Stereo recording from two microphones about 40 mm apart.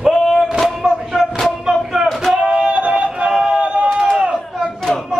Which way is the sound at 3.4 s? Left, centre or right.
Right.